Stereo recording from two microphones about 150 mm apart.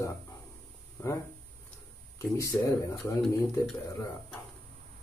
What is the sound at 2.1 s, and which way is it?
Speech, 20° left (ahead or behind).